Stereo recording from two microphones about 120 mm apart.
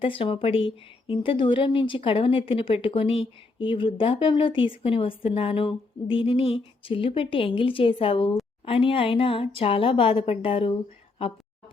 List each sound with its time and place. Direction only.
0.0 s speech: 50° left (ahead or behind)